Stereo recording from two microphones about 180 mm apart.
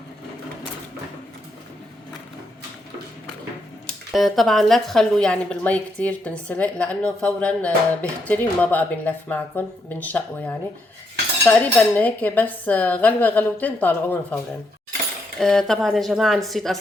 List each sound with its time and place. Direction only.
4.1 s a woman's voice: centre (ahead or behind)
15.4 s a woman's voice: centre (ahead or behind)